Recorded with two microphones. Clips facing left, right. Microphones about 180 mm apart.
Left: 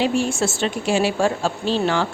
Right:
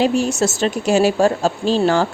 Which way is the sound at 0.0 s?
40° right (ahead or behind).